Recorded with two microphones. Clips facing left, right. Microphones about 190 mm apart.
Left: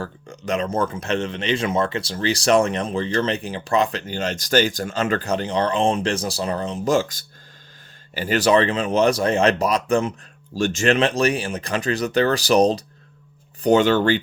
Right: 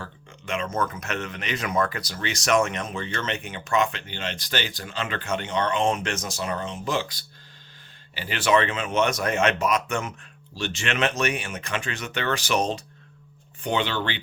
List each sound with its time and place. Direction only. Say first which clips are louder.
0.0 s speech: left 9 dB; 40° left (ahead or behind)
10.5 s speech: left 10 dB; 45° left (ahead or behind)